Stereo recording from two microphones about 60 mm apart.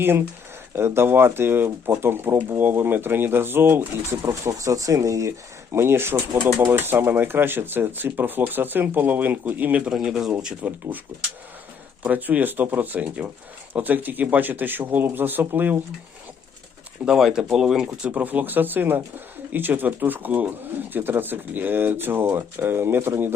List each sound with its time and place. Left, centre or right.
0.8 s speech: right
4.3 s speech: right
5.7 s speech: right
9.8 s speech: centre
10.6 s speech: right
12.0 s speech: right
17.1 s speech: centre
18.1 s speech: right